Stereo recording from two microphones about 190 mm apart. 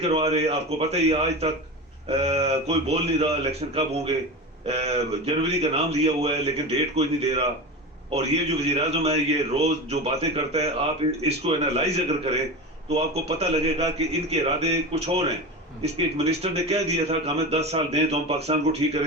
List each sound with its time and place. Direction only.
0.0 s a man's voice: 35° right (ahead or behind)